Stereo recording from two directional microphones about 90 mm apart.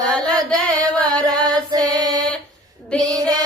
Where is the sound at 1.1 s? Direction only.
10° left (ahead or behind).